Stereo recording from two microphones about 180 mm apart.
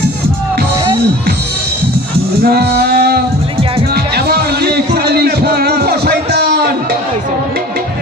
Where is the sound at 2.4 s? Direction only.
60° right (ahead or behind).